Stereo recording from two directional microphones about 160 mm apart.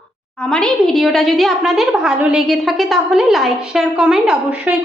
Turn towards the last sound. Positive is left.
turn(degrees=-10)  # may be behind; listen again after turning